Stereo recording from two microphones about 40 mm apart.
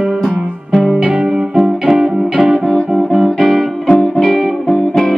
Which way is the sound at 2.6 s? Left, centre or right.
Left.